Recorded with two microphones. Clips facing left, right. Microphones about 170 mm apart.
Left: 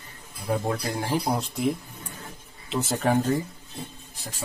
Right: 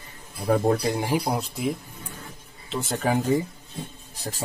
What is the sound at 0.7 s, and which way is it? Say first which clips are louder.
Speech: right 5 dB; 20° right (ahead or behind).